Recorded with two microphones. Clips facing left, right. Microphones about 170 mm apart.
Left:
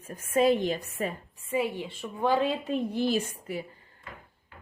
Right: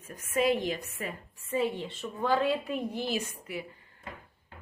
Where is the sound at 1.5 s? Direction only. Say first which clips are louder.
Left 1 dB; 10° left (ahead or behind); by 3.3 s 30° left (ahead or behind).